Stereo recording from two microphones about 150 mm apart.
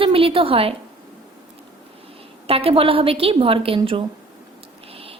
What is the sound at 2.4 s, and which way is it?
A woman's voice, 40° right (ahead or behind).